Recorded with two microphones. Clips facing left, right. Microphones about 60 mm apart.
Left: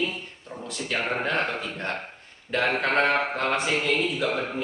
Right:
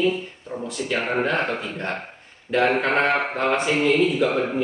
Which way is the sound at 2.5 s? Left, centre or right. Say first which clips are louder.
Right 4 dB; centre.